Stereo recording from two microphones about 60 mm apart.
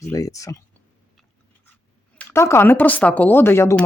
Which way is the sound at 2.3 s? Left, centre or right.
Left.